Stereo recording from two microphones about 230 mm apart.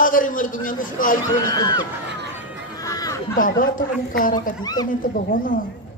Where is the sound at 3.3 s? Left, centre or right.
Left.